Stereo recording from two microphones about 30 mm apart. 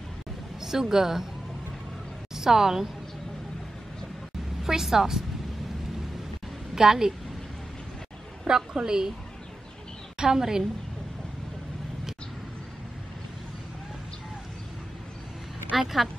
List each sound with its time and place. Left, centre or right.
0.6 s speech: centre
2.3 s a woman's voice: centre
4.7 s a woman's voice: centre
6.7 s a woman's voice: centre
8.5 s a woman's voice: right
10.1 s a woman's voice: centre
15.7 s speech: centre